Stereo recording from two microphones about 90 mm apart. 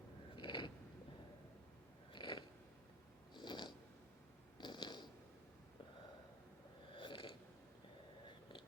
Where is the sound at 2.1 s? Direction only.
60° left (ahead or behind).